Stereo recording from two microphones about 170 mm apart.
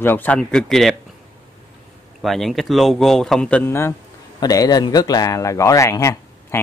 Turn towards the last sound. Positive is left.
turn(degrees=20)  # may be behind; listen again after turning